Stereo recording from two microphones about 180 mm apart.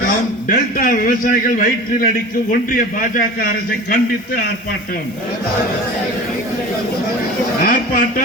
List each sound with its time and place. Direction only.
0.4 s a man's voice: 55° left (ahead or behind)
7.6 s a man's voice: 55° left (ahead or behind)